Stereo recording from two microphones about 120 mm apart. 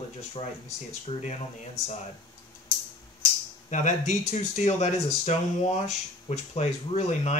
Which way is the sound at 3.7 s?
90° left.